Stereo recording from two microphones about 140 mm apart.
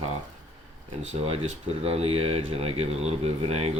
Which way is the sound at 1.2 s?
45° right (ahead or behind).